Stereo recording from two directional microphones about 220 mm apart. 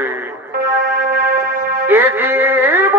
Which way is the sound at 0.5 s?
45° right (ahead or behind).